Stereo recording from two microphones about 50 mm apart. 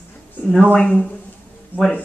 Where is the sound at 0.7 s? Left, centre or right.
Centre.